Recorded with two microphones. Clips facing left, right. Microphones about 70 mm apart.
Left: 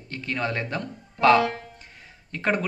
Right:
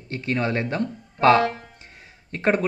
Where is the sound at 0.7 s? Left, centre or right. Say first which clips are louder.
Right 5 dB; right.